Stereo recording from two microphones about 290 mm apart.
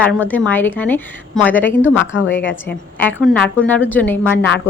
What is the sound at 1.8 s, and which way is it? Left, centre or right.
Speech, left.